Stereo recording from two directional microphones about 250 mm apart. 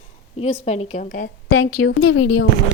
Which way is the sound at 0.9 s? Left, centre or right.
Left.